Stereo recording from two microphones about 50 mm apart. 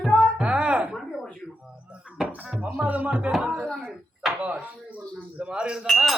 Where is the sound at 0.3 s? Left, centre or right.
Right.